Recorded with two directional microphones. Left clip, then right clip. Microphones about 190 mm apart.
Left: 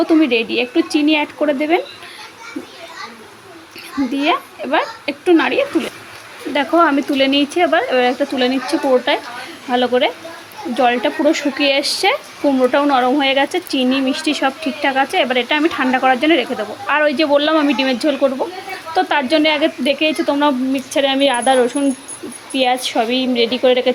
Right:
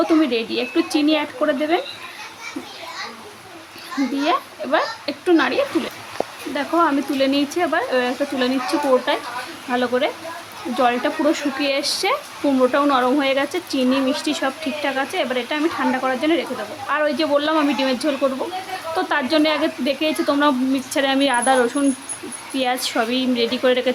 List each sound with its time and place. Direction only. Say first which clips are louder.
0.2 s speech: left 5 dB; 10° left (ahead or behind)
4.2 s speech: left 4 dB; 10° left (ahead or behind)
6.5 s speech: left 6 dB; 20° left (ahead or behind); by 23.9 s 5° left (ahead or behind)